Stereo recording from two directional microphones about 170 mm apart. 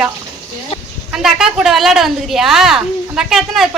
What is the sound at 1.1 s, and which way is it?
A woman's voice, 5° right (ahead or behind).